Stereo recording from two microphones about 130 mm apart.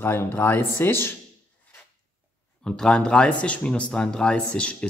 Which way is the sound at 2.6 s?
5° left (ahead or behind).